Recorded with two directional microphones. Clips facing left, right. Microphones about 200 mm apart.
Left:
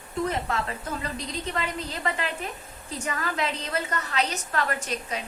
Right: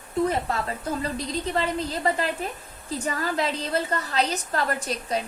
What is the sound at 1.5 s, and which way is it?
A woman's voice, 35° right (ahead or behind).